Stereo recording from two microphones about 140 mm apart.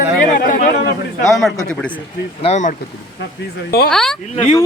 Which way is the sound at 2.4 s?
55° left (ahead or behind).